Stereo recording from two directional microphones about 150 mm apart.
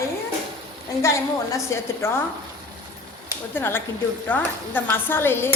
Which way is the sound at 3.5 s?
15° left (ahead or behind).